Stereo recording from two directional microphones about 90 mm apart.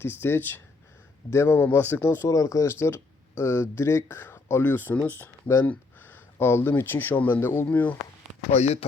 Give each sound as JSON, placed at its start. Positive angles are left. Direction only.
{"t": 0.0, "sound": "speech", "side_deg": 25}
{"t": 2.3, "sound": "speech", "side_deg": 40}